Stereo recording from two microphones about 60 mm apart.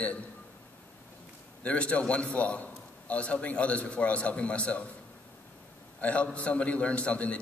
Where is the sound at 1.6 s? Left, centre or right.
Left.